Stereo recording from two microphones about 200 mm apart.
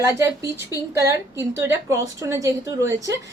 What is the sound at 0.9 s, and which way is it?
A woman's voice, 15° right (ahead or behind).